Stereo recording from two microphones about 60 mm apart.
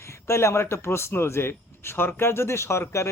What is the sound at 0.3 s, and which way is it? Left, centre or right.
Speech, left.